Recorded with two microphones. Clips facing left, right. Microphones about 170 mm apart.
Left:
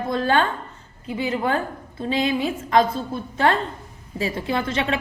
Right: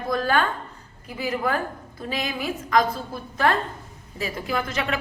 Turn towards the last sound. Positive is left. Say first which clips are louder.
# left 3 dB
turn(degrees=25)  # may be behind; listen again after turning